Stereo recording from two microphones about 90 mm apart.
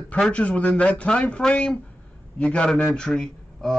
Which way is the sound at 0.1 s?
15° left (ahead or behind).